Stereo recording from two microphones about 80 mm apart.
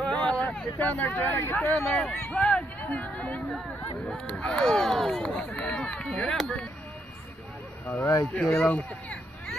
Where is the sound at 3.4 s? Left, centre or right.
Centre.